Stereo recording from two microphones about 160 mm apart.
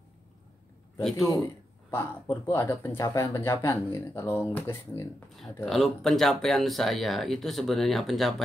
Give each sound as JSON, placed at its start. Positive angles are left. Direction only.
{"t": 1.1, "sound": "speech", "side_deg": 20}
{"t": 5.7, "sound": "speech", "side_deg": 0}